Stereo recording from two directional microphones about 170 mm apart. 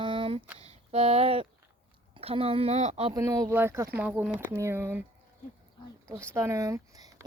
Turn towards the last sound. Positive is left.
turn(degrees=-20)  # may be behind; listen again after turning